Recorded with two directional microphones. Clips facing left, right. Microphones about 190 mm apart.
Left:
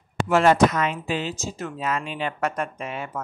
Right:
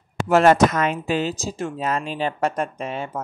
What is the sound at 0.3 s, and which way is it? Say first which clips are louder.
Speech: right 2 dB; 45° right (ahead or behind).